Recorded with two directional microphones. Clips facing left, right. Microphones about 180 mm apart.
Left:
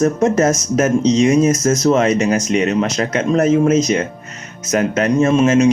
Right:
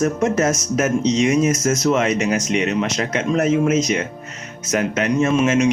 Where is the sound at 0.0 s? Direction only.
35° left (ahead or behind).